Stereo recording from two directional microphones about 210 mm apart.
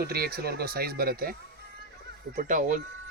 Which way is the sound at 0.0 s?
45° right (ahead or behind).